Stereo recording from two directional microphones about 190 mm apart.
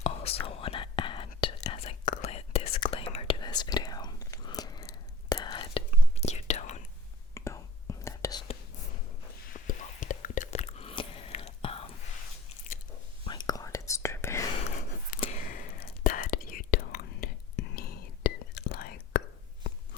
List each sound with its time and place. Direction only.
0.0 s whispering: 30° left (ahead or behind)
7.3 s whispering: 15° left (ahead or behind)
9.5 s biting: 45° left (ahead or behind)
13.2 s whispering: 20° left (ahead or behind)
15.2 s whispering: 40° left (ahead or behind)